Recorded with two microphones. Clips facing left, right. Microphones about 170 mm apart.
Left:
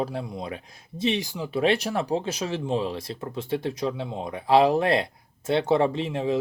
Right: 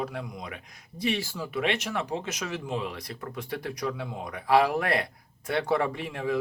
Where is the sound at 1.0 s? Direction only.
20° left (ahead or behind).